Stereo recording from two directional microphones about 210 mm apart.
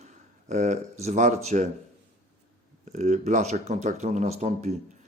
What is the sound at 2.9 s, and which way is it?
A man's voice, 35° right (ahead or behind).